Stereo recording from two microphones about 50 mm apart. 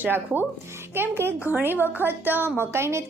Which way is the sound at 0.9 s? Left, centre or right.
Right.